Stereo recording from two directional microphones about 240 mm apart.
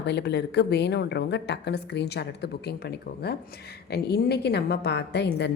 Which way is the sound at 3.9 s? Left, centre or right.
Left.